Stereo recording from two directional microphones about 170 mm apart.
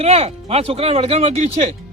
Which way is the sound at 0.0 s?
35° right (ahead or behind).